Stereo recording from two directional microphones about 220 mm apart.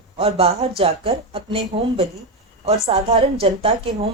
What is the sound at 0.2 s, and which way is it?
Speech, 25° right (ahead or behind).